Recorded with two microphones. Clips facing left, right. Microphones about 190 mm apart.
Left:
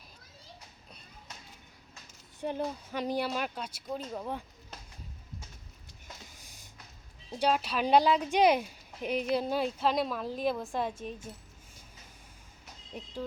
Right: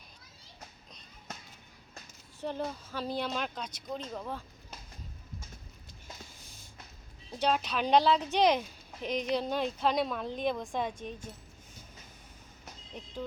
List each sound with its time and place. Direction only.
2.4 s speech: 15° left (ahead or behind)
7.3 s speech: 10° left (ahead or behind)
12.9 s speech: 10° left (ahead or behind)